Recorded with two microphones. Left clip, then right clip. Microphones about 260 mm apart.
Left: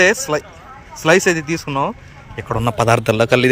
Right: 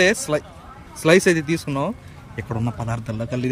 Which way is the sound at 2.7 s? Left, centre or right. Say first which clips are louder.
Left 16 dB; left.